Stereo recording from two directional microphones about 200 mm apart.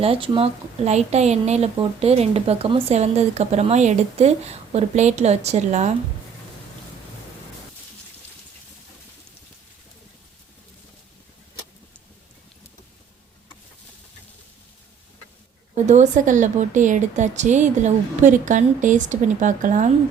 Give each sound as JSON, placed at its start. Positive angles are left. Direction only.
{"t": 0.0, "sound": "a woman's voice", "side_deg": -30}
{"t": 15.7, "sound": "a woman's voice", "side_deg": -35}